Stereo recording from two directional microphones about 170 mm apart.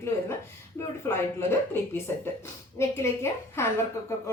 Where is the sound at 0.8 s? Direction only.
15° left (ahead or behind).